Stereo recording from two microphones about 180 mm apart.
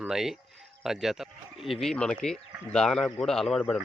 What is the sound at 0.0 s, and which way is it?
Speech, centre (ahead or behind).